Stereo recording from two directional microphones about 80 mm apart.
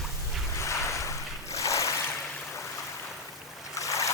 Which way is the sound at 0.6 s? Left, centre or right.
Left.